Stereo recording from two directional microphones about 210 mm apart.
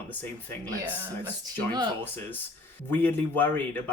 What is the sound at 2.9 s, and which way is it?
Speech, 10° left (ahead or behind).